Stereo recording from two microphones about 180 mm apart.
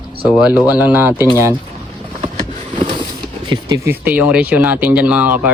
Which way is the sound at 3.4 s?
25° right (ahead or behind).